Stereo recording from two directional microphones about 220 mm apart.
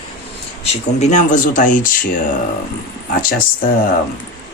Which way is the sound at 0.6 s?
30° left (ahead or behind).